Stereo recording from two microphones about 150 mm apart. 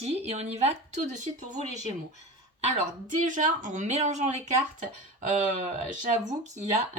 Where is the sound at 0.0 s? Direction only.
45° right (ahead or behind).